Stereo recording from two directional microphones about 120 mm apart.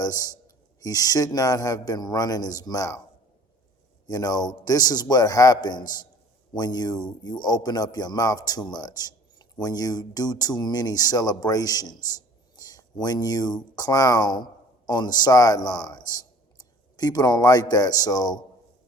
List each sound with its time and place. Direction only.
0.0 s a man's voice: 30° left (ahead or behind)
4.0 s a man's voice: 30° left (ahead or behind)
12.5 s a sound: 30° left (ahead or behind)
13.7 s a man's voice: 30° left (ahead or behind)